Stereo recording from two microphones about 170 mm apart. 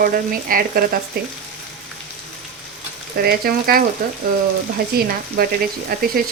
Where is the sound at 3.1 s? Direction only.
60° right (ahead or behind).